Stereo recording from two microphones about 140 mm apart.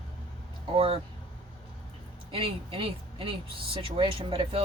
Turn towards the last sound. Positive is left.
turn(degrees=-40)  # may be behind; listen again after turning